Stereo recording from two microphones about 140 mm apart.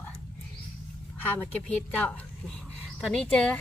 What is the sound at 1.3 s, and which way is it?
A woman's voice, 10° left (ahead or behind).